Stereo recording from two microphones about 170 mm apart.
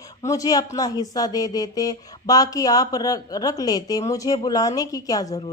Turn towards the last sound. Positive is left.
turn(degrees=20)  # may be behind; listen again after turning